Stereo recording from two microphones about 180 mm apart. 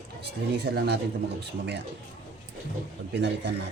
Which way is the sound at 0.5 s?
65° right (ahead or behind).